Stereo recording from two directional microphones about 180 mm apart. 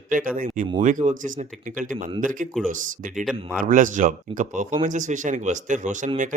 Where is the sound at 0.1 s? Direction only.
50° right (ahead or behind).